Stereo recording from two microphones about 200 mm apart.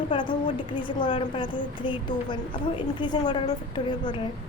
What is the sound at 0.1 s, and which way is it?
A woman's voice, 25° left (ahead or behind).